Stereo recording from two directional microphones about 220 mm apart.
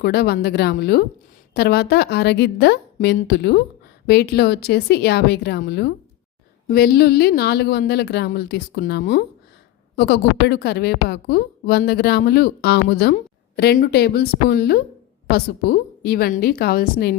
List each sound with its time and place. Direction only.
0.0 s speech: 45° left (ahead or behind)